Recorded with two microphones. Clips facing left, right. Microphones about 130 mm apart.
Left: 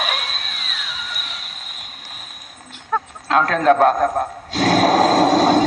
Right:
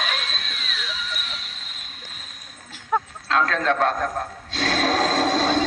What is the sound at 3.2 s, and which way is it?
Speech, 20° left (ahead or behind).